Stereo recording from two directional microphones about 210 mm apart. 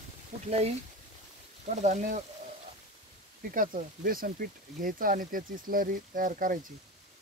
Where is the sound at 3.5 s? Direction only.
40° right (ahead or behind).